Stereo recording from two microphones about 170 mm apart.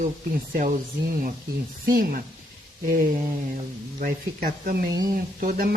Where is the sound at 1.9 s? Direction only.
55° right (ahead or behind).